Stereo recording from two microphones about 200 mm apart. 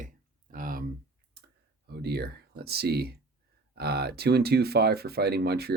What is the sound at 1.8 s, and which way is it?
Speech, 50° right (ahead or behind).